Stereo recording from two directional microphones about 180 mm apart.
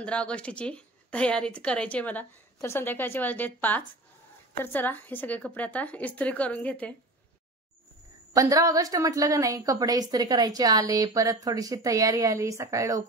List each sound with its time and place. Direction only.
0.0 s a woman's voice: 5° left (ahead or behind)
8.4 s a woman's voice: 20° right (ahead or behind)